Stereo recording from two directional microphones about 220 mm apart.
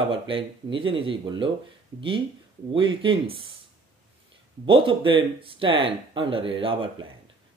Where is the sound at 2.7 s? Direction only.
25° right (ahead or behind).